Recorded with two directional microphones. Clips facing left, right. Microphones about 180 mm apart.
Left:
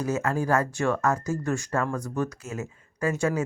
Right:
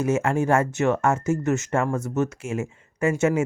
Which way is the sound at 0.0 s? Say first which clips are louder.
Right 4 dB; 25° right (ahead or behind).